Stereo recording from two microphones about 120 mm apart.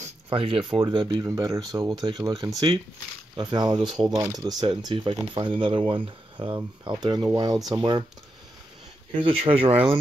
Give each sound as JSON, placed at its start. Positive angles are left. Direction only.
{"t": 0.3, "sound": "speech", "side_deg": -45}
{"t": 9.1, "sound": "speech", "side_deg": -45}